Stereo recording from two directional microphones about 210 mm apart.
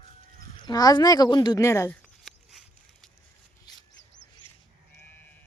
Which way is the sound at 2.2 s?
Centre (ahead or behind).